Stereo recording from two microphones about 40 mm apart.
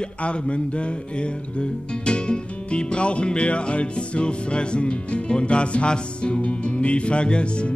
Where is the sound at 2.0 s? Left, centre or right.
Left.